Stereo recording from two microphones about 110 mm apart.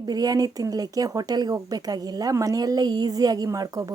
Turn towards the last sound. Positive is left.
turn(degrees=-35)  # may be behind; listen again after turning